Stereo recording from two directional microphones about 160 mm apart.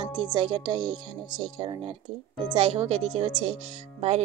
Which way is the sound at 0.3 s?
25° right (ahead or behind).